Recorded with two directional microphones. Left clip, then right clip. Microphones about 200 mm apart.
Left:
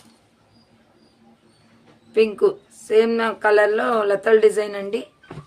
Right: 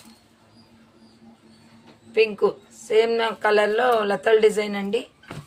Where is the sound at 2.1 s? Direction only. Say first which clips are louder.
Left 2 dB; 55° left (ahead or behind).